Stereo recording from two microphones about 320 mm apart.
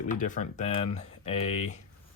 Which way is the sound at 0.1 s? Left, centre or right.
Left.